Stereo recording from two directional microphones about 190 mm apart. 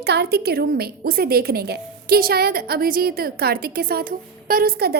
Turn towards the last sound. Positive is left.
turn(degrees=-55)  # may be behind; listen again after turning